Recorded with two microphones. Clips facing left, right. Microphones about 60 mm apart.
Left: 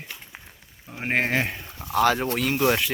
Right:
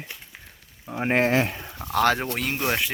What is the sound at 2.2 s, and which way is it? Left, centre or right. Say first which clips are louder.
Speech: left 3 dB; right.